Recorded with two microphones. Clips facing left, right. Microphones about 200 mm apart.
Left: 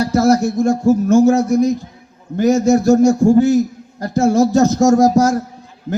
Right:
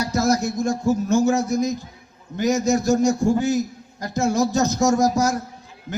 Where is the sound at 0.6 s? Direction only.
55° left (ahead or behind).